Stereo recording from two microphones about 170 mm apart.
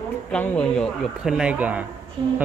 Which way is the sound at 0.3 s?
5° left (ahead or behind).